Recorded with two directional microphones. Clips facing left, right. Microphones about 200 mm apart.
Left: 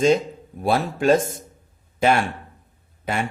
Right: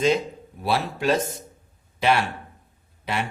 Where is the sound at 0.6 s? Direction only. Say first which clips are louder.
Left 4 dB; 50° left (ahead or behind).